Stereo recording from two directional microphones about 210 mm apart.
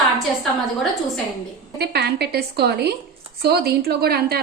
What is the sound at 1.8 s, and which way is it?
A woman's voice, 50° right (ahead or behind).